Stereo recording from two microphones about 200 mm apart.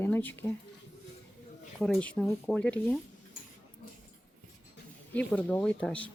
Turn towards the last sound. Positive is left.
turn(degrees=5)  # may be behind; listen again after turning